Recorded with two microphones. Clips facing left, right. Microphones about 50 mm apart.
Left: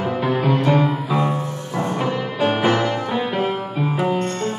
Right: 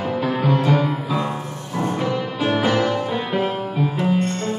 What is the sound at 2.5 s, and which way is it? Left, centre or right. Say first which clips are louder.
Music: even; centre.